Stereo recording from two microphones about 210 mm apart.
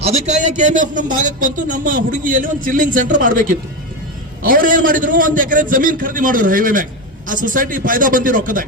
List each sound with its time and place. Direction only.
0.0 s a man's voice: 30° right (ahead or behind)
4.4 s a man's voice: 40° right (ahead or behind)